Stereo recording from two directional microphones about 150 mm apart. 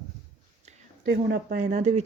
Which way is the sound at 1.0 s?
90° right.